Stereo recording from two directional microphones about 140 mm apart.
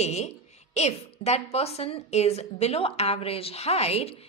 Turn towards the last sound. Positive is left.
turn(degrees=45)  # may be behind; listen again after turning